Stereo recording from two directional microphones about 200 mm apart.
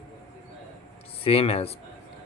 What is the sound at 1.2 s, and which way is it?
Speech, 30° left (ahead or behind).